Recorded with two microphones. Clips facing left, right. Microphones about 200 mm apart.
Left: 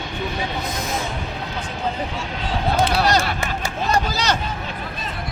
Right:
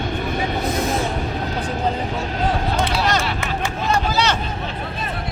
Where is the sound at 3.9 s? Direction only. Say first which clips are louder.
Right 1 dB; 40° left (ahead or behind).